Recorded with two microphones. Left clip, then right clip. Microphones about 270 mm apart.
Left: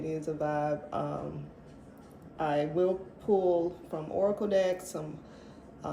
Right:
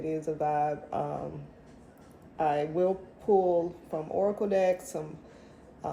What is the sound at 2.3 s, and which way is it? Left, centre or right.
Speech, centre.